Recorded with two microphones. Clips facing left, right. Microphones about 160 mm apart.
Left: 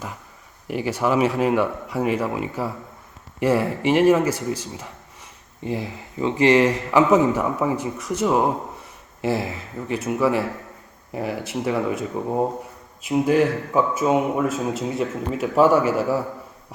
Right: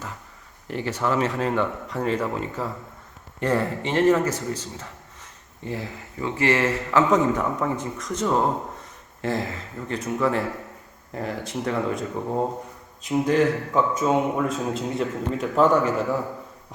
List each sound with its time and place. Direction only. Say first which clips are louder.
0.7 s a man's voice: left 3 dB; 10° left (ahead or behind)